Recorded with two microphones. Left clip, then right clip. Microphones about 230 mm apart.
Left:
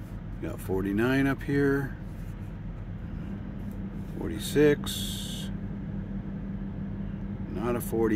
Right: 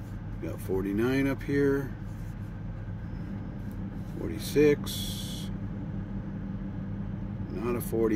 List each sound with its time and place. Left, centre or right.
0.7 s speech: left
4.4 s speech: left
7.5 s speech: left